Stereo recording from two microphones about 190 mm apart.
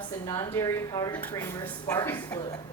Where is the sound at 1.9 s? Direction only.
15° left (ahead or behind).